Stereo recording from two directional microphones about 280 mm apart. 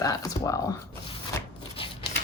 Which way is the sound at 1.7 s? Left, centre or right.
Centre.